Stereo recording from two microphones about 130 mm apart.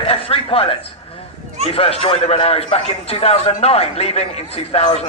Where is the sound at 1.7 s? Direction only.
50° left (ahead or behind).